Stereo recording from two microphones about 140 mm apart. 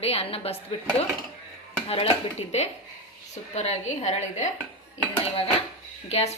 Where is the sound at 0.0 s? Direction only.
45° left (ahead or behind).